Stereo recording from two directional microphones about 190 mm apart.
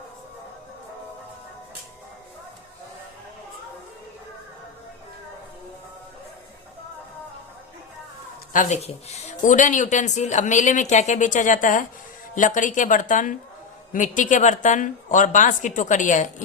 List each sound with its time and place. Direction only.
8.5 s a woman's voice: 35° left (ahead or behind)